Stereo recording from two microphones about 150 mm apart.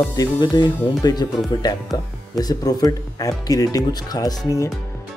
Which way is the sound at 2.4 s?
25° left (ahead or behind).